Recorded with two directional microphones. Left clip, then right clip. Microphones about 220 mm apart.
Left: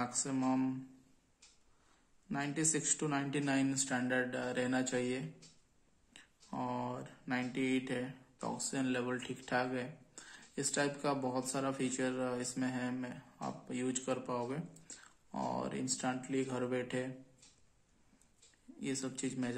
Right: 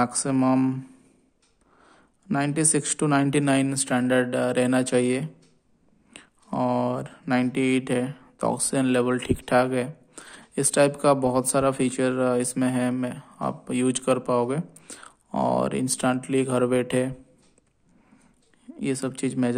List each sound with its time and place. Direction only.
0.0 s speech: 50° right (ahead or behind)
1.9 s speech: 50° right (ahead or behind)
18.8 s speech: 45° right (ahead or behind)